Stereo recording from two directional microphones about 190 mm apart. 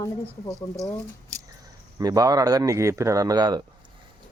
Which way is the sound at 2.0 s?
20° right (ahead or behind).